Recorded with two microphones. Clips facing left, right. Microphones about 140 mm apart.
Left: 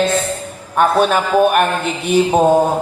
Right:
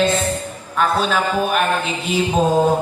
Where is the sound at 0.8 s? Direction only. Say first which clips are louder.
Left 5 dB; 60° left (ahead or behind).